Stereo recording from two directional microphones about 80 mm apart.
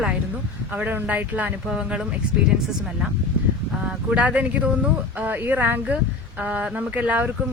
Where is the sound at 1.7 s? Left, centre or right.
Centre.